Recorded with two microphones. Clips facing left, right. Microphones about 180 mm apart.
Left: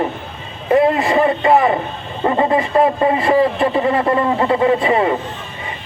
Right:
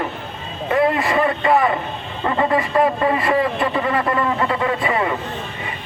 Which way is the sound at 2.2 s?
25° left (ahead or behind).